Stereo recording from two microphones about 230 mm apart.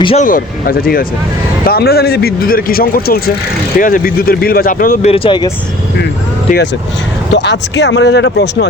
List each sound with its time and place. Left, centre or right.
0.0 s speech: left
0.3 s speech: left
5.1 s speech: left
7.3 s speech: left